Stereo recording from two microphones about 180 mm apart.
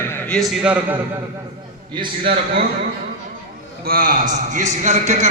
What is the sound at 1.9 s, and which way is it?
Speech, 25° right (ahead or behind).